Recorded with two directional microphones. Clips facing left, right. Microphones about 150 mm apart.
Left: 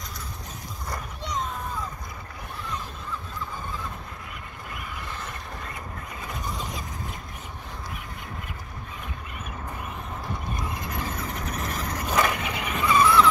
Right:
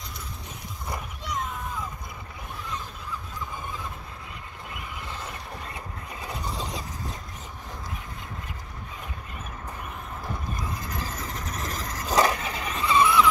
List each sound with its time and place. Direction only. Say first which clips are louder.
6.2 s vehicle: right 1 dB; 30° right (ahead or behind)
11.0 s vehicle: left 2 dB; 35° right (ahead or behind); by 13.3 s 15° right (ahead or behind)